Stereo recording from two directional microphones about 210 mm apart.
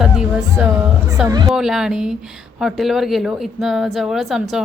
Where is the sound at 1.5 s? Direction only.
Centre (ahead or behind).